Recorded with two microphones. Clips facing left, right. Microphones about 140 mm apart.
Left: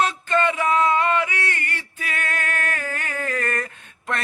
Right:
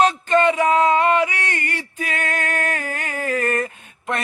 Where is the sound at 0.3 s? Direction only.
20° right (ahead or behind).